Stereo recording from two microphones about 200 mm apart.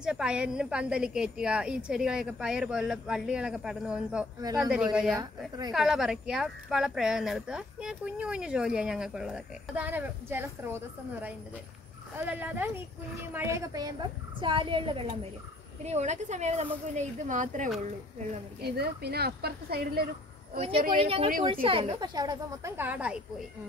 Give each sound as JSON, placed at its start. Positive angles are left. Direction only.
{"t": 0.0, "sound": "speech", "side_deg": -5}
{"t": 5.1, "sound": "speech", "side_deg": -20}
{"t": 5.7, "sound": "speech", "side_deg": 0}
{"t": 12.2, "sound": "speech", "side_deg": -10}
{"t": 18.6, "sound": "speech", "side_deg": -50}
{"t": 20.5, "sound": "speech", "side_deg": -30}